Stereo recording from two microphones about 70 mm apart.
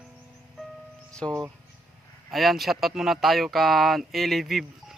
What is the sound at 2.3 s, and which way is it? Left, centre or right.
Speech, centre.